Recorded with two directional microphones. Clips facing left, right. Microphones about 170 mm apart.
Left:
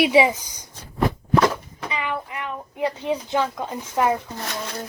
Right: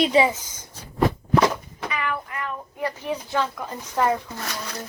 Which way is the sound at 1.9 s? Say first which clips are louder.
Left 1 dB; 20° left (ahead or behind).